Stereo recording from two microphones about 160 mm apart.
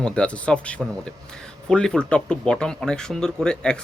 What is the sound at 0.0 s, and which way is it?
Speech, 5° left (ahead or behind).